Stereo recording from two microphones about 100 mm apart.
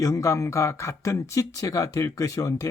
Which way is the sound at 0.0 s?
30° left (ahead or behind).